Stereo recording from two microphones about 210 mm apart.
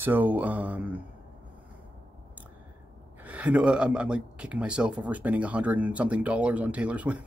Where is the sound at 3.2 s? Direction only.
5° right (ahead or behind).